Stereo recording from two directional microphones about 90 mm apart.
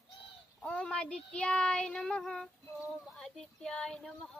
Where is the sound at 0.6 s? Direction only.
10° left (ahead or behind).